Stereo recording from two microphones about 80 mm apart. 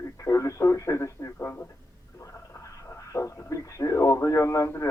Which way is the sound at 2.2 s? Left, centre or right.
Left.